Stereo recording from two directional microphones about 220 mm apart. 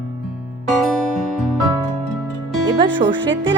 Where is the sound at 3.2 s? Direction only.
55° right (ahead or behind).